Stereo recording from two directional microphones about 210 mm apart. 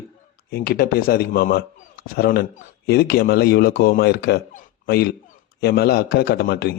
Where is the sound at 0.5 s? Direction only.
45° left (ahead or behind).